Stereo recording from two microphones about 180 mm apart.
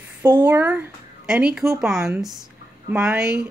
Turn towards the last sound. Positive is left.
turn(degrees=-5)  # may be behind; listen again after turning